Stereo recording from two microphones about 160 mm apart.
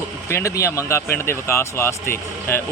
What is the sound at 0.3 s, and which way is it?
Speech, 20° left (ahead or behind).